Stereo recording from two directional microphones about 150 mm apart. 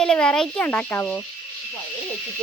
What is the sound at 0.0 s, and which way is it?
Speech, 5° left (ahead or behind).